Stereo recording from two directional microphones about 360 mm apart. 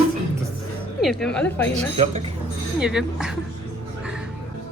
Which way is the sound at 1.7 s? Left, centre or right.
Centre.